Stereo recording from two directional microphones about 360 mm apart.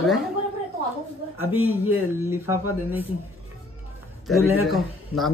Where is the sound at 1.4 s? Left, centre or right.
Centre.